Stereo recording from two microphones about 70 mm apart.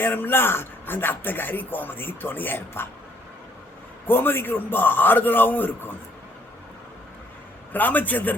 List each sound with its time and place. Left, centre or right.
0.0 s speech: left
4.0 s speech: left
7.7 s speech: left